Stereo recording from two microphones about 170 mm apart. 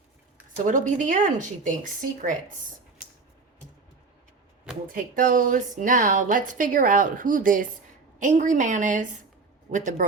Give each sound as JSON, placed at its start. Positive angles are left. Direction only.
{"t": 0.5, "sound": "a woman's voice", "side_deg": -50}
{"t": 4.9, "sound": "a woman's voice", "side_deg": -55}